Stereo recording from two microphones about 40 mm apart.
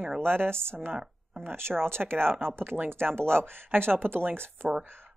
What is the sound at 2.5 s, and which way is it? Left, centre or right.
Speech, right.